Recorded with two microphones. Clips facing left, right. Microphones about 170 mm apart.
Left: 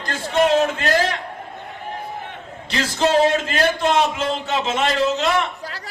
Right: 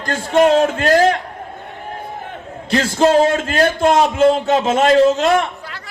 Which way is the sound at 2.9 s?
50° right (ahead or behind).